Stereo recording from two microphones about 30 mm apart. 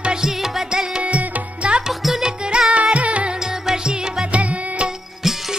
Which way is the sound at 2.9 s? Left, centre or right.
Right.